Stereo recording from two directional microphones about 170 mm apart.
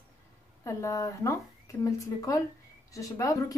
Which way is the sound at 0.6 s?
20° left (ahead or behind).